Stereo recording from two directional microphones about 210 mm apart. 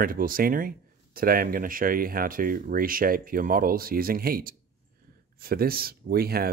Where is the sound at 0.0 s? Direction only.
40° right (ahead or behind).